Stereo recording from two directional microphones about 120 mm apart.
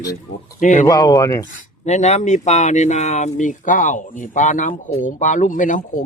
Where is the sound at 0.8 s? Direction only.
30° left (ahead or behind).